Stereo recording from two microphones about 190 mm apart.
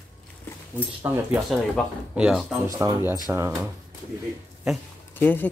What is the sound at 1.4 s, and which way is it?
Speech, 5° right (ahead or behind).